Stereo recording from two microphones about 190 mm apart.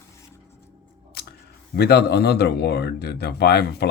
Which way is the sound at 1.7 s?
60° left (ahead or behind).